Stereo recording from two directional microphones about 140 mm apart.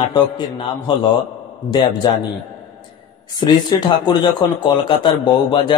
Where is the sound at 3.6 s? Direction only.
30° left (ahead or behind).